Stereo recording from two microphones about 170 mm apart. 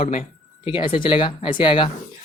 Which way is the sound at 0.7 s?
30° left (ahead or behind).